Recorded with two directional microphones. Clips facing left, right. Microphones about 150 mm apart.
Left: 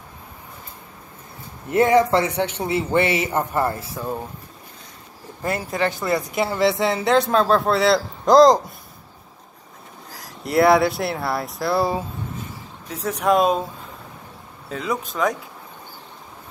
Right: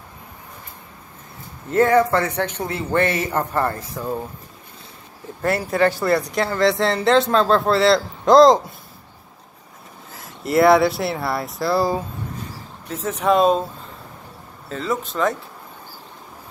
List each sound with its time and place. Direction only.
1.7 s a man's voice: 15° left (ahead or behind)
5.7 s speech: 20° left (ahead or behind)
6.2 s speech: 5° left (ahead or behind)
10.1 s speech: centre (ahead or behind)
14.7 s speech: 5° left (ahead or behind)